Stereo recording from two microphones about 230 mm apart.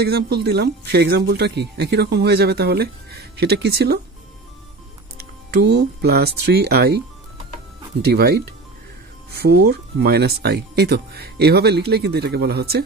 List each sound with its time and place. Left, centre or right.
0.0 s speech: right
5.5 s speech: right
8.0 s speech: right
9.4 s speech: right